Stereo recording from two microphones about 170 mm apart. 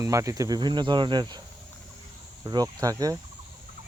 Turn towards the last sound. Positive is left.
turn(degrees=-20)  # may be behind; listen again after turning